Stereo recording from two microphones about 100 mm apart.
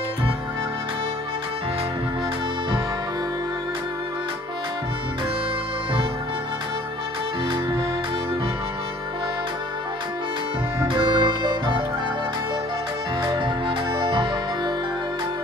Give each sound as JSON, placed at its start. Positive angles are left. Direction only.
{"t": 10.9, "sound": "music", "side_deg": -50}
{"t": 13.2, "sound": "music", "side_deg": -55}